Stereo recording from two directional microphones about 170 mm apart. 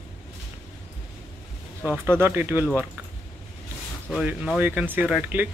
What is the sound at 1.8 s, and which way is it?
Speech, 10° right (ahead or behind).